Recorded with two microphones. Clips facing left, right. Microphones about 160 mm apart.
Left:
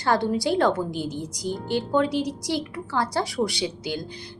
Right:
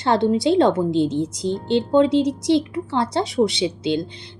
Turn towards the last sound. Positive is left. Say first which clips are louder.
# right 7 dB
turn(degrees=-25)  # may be behind; listen again after turning